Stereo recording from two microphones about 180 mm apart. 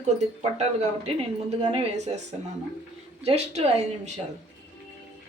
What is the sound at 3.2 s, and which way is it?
Speech, 35° right (ahead or behind).